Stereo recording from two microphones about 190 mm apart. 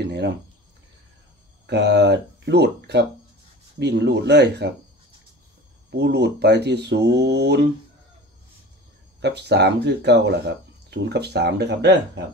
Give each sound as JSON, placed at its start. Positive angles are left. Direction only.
{"t": 1.7, "sound": "speech", "side_deg": -65}
{"t": 5.9, "sound": "speech", "side_deg": -60}
{"t": 9.2, "sound": "speech", "side_deg": -60}